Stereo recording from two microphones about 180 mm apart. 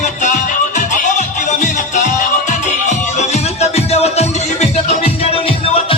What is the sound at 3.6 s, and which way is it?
Music, 35° left (ahead or behind).